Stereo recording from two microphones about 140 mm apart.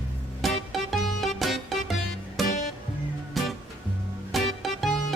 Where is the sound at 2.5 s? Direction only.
65° left (ahead or behind).